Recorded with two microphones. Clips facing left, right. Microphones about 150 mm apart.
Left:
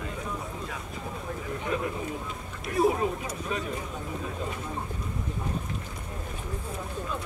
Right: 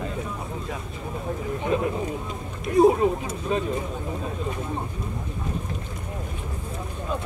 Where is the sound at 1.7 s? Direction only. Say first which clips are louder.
Right 6 dB; 25° right (ahead or behind).